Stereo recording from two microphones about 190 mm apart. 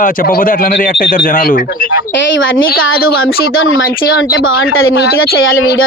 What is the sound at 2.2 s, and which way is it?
Speech, 75° left (ahead or behind).